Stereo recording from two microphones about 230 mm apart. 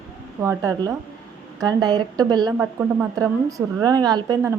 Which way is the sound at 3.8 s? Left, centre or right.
Centre.